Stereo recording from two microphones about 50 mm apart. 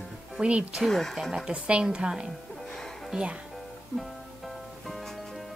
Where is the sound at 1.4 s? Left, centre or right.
Right.